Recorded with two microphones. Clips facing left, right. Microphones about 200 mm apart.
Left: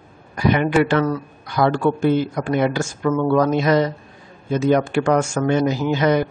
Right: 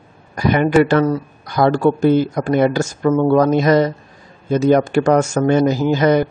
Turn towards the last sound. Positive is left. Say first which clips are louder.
# right 4 dB
turn(degrees=-40)  # may be behind; listen again after turning